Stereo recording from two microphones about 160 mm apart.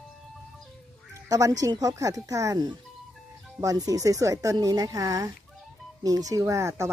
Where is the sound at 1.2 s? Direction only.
20° right (ahead or behind).